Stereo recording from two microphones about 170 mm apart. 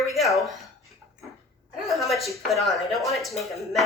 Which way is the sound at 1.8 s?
Centre (ahead or behind).